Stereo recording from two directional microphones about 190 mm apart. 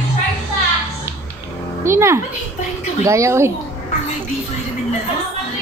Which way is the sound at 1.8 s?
15° right (ahead or behind).